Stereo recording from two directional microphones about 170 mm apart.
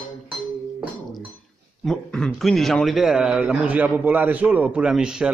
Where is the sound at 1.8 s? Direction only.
5° left (ahead or behind).